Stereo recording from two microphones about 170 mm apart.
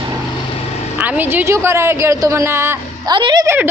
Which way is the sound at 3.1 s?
25° right (ahead or behind).